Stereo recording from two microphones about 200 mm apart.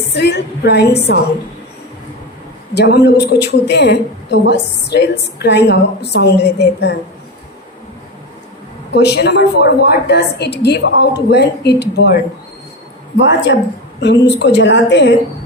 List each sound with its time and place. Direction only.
0.1 s a woman's voice: 55° left (ahead or behind)
2.7 s a woman's voice: 55° left (ahead or behind)
8.9 s a woman's voice: 55° left (ahead or behind)